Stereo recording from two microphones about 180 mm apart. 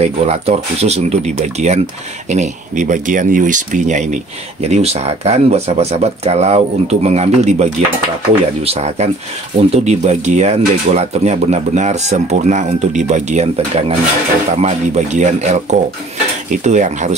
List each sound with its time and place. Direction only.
0.0 s speech: 35° right (ahead or behind)
16.6 s speech: 40° right (ahead or behind)